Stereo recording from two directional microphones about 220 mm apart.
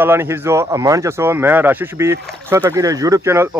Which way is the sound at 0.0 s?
10° right (ahead or behind).